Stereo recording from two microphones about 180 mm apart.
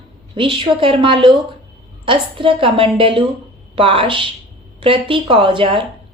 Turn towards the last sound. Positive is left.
turn(degrees=-30)  # may be behind; listen again after turning